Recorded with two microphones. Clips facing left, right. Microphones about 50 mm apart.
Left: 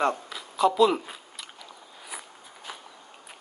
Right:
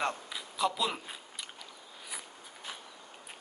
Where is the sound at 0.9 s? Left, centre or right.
Centre.